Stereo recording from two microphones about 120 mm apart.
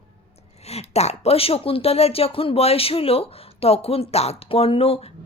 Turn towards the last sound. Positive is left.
turn(degrees=55)  # may be behind; listen again after turning